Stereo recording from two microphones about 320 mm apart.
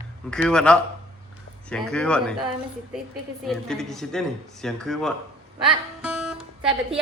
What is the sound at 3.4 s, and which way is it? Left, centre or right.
Speech, centre.